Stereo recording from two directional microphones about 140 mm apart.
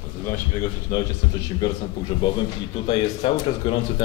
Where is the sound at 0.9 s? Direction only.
25° left (ahead or behind).